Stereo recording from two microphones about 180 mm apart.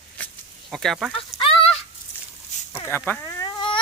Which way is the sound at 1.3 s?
30° left (ahead or behind).